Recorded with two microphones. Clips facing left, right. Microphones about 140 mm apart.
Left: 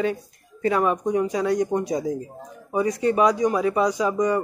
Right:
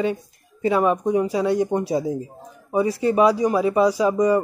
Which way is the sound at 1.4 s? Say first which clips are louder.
Right 2 dB; 30° right (ahead or behind).